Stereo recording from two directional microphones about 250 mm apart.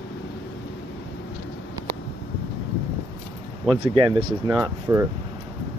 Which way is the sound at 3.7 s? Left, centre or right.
Right.